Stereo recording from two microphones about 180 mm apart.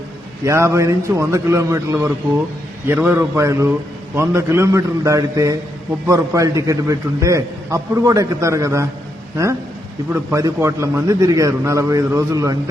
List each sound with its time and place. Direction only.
0.4 s a man's voice: 15° right (ahead or behind)
10.1 s a man's voice: 15° right (ahead or behind)